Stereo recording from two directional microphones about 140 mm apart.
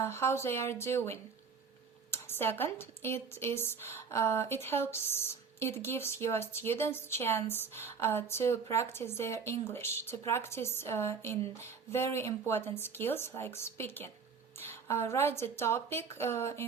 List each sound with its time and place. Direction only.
0.0 s a woman's voice: 20° left (ahead or behind)